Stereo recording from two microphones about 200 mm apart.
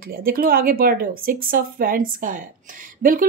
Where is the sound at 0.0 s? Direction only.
45° right (ahead or behind).